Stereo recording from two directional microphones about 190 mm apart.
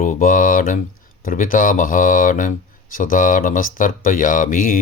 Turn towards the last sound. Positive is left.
turn(degrees=45)  # may be behind; listen again after turning